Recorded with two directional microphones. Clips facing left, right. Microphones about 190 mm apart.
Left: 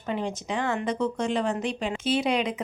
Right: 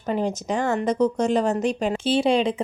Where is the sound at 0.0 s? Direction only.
40° right (ahead or behind).